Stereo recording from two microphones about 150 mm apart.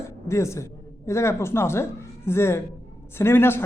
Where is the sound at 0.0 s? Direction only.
20° left (ahead or behind).